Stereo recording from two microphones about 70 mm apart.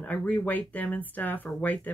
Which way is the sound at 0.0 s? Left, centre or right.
Left.